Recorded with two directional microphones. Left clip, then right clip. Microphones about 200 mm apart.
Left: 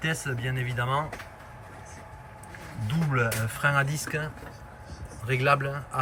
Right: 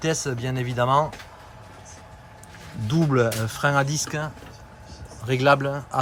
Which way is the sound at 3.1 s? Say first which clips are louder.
Right 4 dB; 15° right (ahead or behind).